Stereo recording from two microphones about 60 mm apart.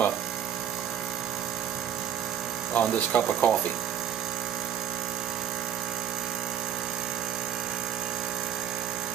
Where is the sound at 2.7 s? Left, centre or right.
Left.